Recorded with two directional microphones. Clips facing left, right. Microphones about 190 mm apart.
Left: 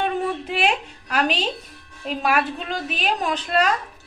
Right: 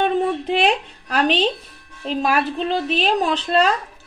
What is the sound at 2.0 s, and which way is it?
A woman's voice, 35° right (ahead or behind).